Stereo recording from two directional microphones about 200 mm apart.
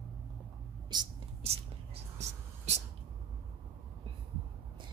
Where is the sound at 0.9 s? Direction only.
25° right (ahead or behind).